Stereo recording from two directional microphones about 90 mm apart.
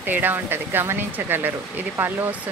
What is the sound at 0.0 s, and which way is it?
Speech, 20° right (ahead or behind).